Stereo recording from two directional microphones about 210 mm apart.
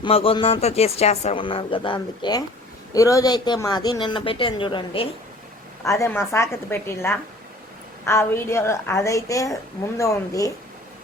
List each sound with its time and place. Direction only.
0.0 s a woman's voice: 25° left (ahead or behind)